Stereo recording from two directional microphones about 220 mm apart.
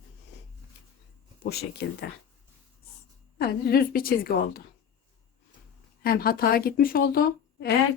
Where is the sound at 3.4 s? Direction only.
45° left (ahead or behind).